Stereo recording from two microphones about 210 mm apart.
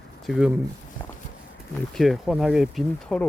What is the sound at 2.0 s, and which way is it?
Speech, centre (ahead or behind).